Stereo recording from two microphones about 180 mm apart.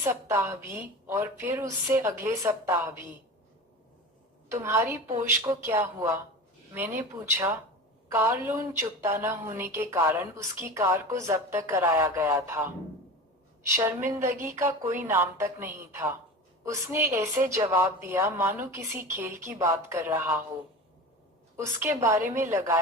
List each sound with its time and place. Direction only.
0.0 s a woman's voice: 15° right (ahead or behind)
4.4 s a woman's voice: 15° right (ahead or behind)
7.2 s a woman's voice: 15° right (ahead or behind)
21.5 s a woman's voice: 15° right (ahead or behind)